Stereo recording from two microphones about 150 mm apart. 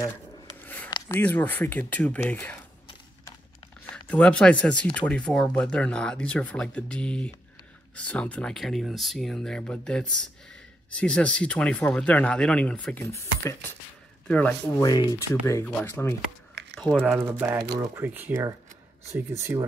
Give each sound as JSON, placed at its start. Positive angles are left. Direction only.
{"t": 0.8, "sound": "a sound", "side_deg": 25}
{"t": 1.2, "sound": "speech", "side_deg": 10}
{"t": 3.9, "sound": "speech", "side_deg": 10}
{"t": 14.8, "sound": "speech", "side_deg": 25}
{"t": 16.7, "sound": "typing", "side_deg": 5}
{"t": 17.0, "sound": "speech", "side_deg": -10}
{"t": 19.5, "sound": "speech", "side_deg": -20}